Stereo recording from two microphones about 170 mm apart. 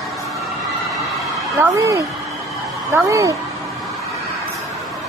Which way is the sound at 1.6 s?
20° right (ahead or behind).